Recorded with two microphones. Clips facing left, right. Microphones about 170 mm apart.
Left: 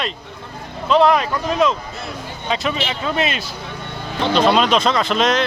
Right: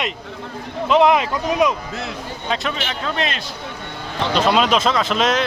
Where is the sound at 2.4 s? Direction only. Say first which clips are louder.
Left 3 dB; centre (ahead or behind).